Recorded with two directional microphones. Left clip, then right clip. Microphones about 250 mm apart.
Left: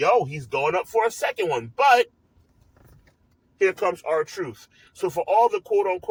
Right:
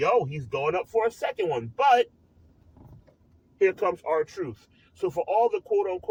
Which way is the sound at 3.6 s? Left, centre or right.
Centre.